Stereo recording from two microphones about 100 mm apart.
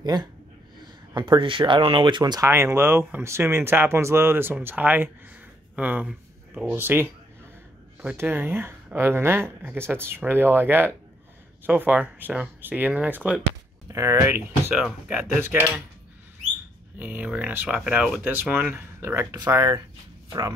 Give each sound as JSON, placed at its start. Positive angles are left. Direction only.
{"t": 0.0, "sound": "speech", "side_deg": -45}
{"t": 2.4, "sound": "speech", "side_deg": -25}
{"t": 8.2, "sound": "speech", "side_deg": -20}
{"t": 13.8, "sound": "speech", "side_deg": -30}
{"t": 17.0, "sound": "speech", "side_deg": -15}
{"t": 18.2, "sound": "speech", "side_deg": -20}
{"t": 19.3, "sound": "speech", "side_deg": -40}